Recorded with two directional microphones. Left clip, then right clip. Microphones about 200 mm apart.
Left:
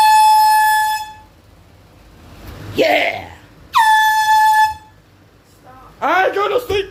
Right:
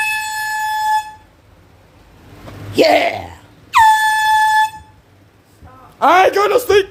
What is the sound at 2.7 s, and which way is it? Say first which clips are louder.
Air horn: right 2 dB; 25° right (ahead or behind).